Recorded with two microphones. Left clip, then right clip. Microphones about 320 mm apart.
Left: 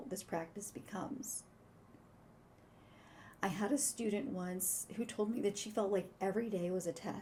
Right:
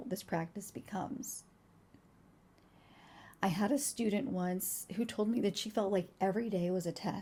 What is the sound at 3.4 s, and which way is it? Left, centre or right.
Speech, right.